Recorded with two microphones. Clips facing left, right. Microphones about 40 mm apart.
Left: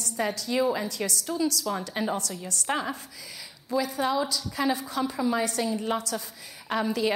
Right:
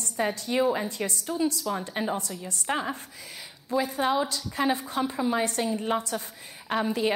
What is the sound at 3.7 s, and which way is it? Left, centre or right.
A woman's voice, right.